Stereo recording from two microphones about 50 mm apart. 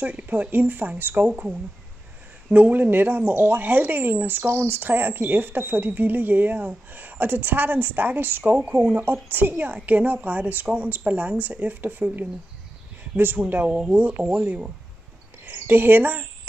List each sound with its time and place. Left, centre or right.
0.0 s speech: right
1.3 s speech: right
2.5 s speech: right
4.5 s speech: right
8.5 s speech: right
13.7 s speech: centre
13.9 s speech: right
14.2 s speech: right
15.4 s speech: right